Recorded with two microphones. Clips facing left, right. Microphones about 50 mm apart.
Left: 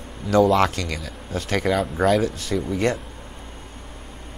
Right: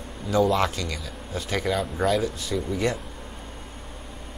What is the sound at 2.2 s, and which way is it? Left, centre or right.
Speech, left.